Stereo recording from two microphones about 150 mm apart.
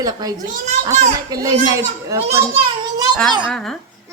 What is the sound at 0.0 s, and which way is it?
A child's voice, 25° right (ahead or behind).